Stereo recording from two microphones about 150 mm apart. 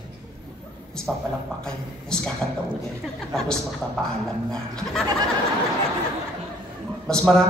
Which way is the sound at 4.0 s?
5° left (ahead or behind).